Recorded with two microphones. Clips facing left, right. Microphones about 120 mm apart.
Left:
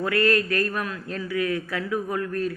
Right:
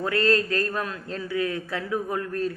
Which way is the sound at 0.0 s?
25° right (ahead or behind).